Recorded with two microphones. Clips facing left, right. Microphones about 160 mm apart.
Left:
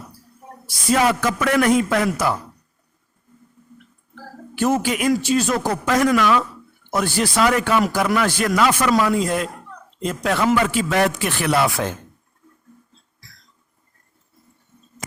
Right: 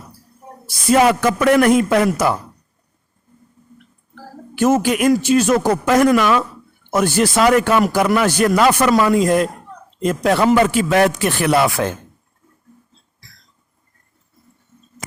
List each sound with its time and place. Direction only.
0.9 s a man's voice: 55° right (ahead or behind)
4.8 s a man's voice: 55° right (ahead or behind)
5.5 s speech: 90° right
5.9 s a man's voice: 50° right (ahead or behind)
8.9 s a man's voice: 55° right (ahead or behind)
10.3 s a man's voice: 35° right (ahead or behind)
10.7 s a man's voice: 55° right (ahead or behind)